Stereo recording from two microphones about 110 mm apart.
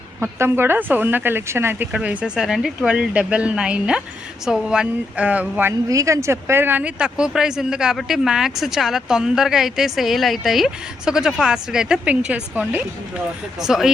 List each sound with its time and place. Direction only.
0.2 s speech: 20° right (ahead or behind)
1.9 s speech: 10° right (ahead or behind)
5.9 s speech: 30° right (ahead or behind); by 13.9 s 5° right (ahead or behind)